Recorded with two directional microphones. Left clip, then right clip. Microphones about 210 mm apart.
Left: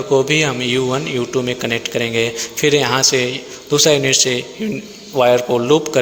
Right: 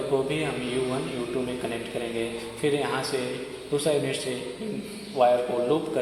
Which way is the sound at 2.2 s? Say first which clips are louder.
Left 12 dB; 45° left (ahead or behind).